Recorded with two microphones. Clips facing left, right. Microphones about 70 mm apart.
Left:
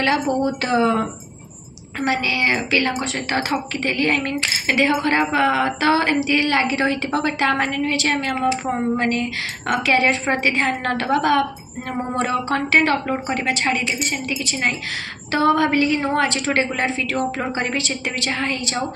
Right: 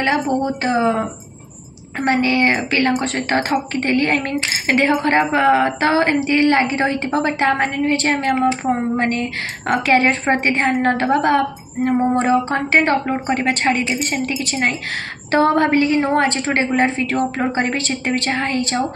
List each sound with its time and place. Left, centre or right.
0.0 s speech: right
2.0 s a woman's voice: right